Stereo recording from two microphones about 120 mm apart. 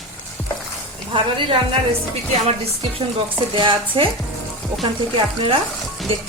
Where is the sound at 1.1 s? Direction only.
45° right (ahead or behind).